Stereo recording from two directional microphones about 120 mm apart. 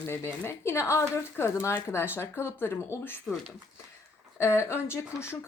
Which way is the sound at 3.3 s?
5° left (ahead or behind).